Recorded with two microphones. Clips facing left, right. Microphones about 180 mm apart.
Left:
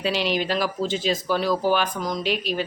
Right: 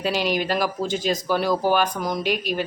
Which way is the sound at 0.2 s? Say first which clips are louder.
Right 1 dB; 45° right (ahead or behind).